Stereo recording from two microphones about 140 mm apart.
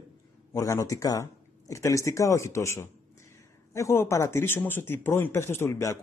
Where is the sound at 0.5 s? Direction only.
20° left (ahead or behind).